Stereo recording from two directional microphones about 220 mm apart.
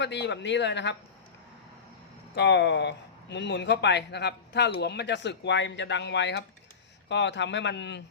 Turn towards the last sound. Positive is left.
turn(degrees=55)  # may be behind; listen again after turning